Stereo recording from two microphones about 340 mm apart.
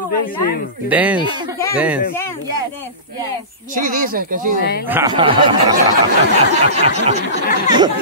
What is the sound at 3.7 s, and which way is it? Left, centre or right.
Speech, right.